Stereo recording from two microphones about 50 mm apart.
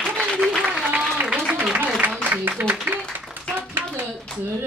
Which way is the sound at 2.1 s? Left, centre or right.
Right.